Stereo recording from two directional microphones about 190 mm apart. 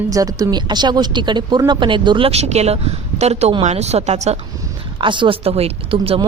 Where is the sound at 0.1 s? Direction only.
20° right (ahead or behind); by 4.4 s 35° right (ahead or behind).